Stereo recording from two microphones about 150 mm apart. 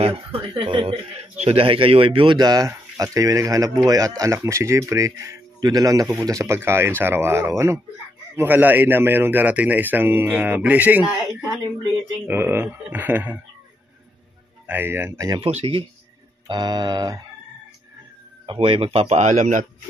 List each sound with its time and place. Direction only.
0.7 s a man's voice: 35° right (ahead or behind); by 13.4 s 10° right (ahead or behind)
14.7 s speech: 15° right (ahead or behind)
15.4 s speech: 40° right (ahead or behind)
16.4 s a man's voice: 25° right (ahead or behind)
18.4 s speech: 35° right (ahead or behind); by 19.6 s 55° right (ahead or behind)